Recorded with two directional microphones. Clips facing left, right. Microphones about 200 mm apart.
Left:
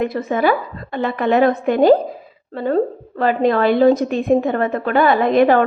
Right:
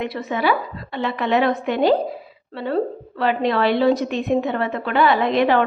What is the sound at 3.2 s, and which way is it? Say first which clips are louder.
A woman's voice: left 4 dB; 45° left (ahead or behind).